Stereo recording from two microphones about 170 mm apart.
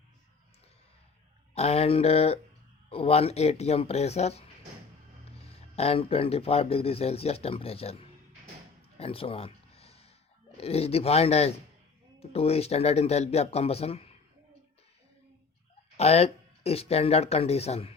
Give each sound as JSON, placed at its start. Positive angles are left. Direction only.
{"t": 1.5, "sound": "speech", "side_deg": 35}
{"t": 9.0, "sound": "a sound", "side_deg": 35}
{"t": 10.6, "sound": "speech", "side_deg": 35}
{"t": 16.0, "sound": "speech", "side_deg": 40}